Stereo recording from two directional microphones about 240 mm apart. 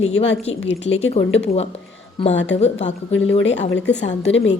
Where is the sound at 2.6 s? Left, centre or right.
Left.